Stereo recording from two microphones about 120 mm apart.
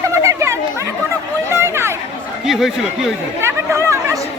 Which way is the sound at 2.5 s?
Centre (ahead or behind).